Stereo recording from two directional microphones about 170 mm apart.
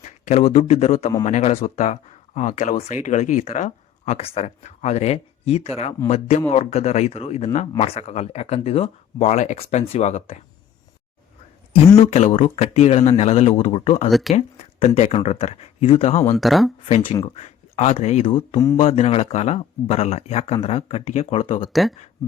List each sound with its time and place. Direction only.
0.0 s speech: 40° left (ahead or behind)
11.9 s speech: 40° left (ahead or behind)
14.1 s speech: centre (ahead or behind)
14.3 s speech: 40° left (ahead or behind)
16.4 s speech: centre (ahead or behind)
17.2 s speech: 35° left (ahead or behind)
21.7 s speech: centre (ahead or behind)